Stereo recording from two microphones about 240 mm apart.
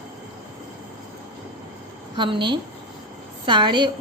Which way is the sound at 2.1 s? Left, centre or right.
Centre.